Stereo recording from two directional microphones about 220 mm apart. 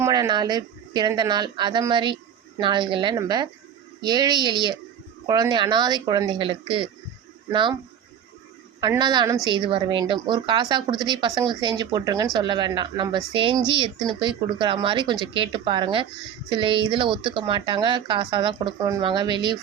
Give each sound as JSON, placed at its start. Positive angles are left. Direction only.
{"t": 0.0, "sound": "speech", "side_deg": -15}
{"t": 8.8, "sound": "speech", "side_deg": -20}